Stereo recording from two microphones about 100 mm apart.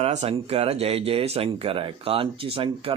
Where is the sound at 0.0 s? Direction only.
85° right.